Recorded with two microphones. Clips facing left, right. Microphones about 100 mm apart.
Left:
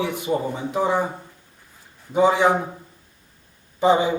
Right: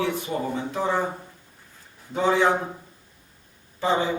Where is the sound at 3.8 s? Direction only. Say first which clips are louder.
Left 6 dB; 15° left (ahead or behind).